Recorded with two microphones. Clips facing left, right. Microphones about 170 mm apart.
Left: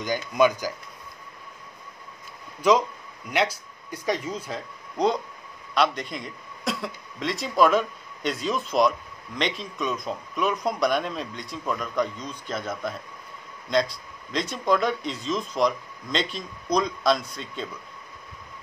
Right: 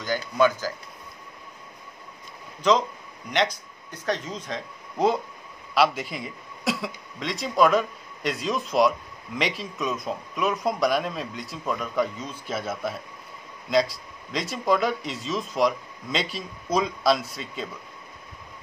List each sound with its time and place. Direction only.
0.4 s speech: 15° left (ahead or behind)
2.6 s a man's voice: 10° left (ahead or behind)